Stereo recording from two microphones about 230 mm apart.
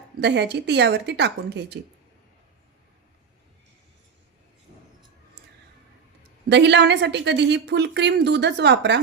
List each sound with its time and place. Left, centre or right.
0.2 s a woman's voice: right
6.5 s a woman's voice: right